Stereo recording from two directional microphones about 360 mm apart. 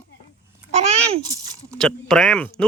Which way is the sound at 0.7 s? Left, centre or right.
Centre.